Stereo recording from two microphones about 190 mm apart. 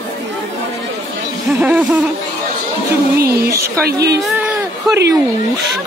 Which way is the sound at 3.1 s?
55° right (ahead or behind).